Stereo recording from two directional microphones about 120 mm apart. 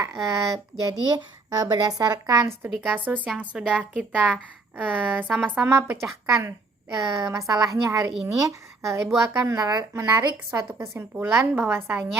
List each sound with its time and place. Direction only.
0.0 s a child's voice: 30° right (ahead or behind)
2.6 s a woman's voice: 15° right (ahead or behind)